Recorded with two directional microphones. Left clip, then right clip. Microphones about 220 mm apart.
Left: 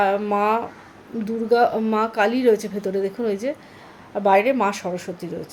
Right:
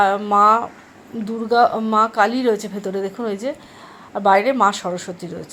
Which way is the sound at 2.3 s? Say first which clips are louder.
Left 1 dB; 20° left (ahead or behind).